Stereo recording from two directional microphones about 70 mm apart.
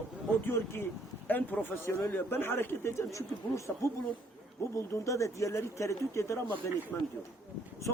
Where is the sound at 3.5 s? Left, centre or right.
Left.